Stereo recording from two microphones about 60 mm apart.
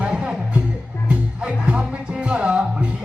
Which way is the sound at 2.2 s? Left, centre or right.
Centre.